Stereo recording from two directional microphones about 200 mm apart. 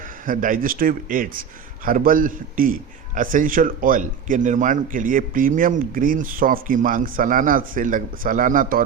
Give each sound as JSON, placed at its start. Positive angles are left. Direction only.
{"t": 0.3, "sound": "a man's voice", "side_deg": -45}